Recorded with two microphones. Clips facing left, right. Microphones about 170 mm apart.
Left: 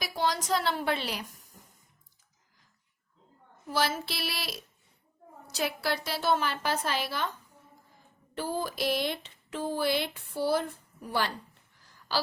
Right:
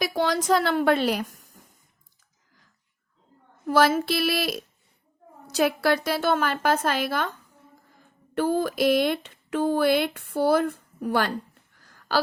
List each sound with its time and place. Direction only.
0.0 s a woman's voice: 65° right (ahead or behind)
3.7 s speech: 55° right (ahead or behind)
8.4 s speech: 60° right (ahead or behind)
11.8 s a sound: 55° right (ahead or behind)